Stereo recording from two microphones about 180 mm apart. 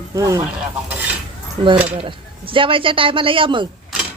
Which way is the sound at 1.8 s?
30° right (ahead or behind).